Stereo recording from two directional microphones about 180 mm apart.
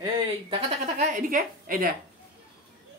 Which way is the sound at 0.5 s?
35° right (ahead or behind).